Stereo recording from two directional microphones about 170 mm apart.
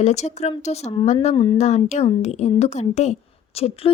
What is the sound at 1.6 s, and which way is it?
A woman's voice, 45° left (ahead or behind).